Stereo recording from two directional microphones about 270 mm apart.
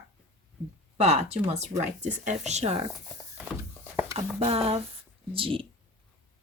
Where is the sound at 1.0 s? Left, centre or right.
Right.